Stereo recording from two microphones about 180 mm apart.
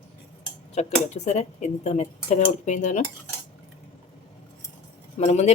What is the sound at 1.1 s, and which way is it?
Speech, 40° left (ahead or behind).